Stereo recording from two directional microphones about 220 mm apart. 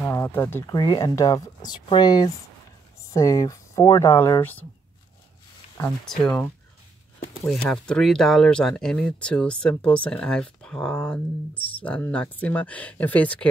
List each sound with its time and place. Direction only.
0.0 s speech: 10° left (ahead or behind)
5.8 s speech: 5° left (ahead or behind)